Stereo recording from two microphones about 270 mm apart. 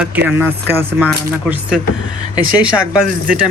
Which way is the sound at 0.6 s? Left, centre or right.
Centre.